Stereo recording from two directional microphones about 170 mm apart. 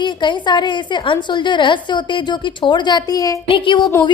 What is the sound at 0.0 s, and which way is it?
A woman's voice, 25° left (ahead or behind).